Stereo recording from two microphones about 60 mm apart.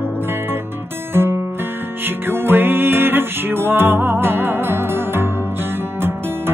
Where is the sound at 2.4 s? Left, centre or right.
Right.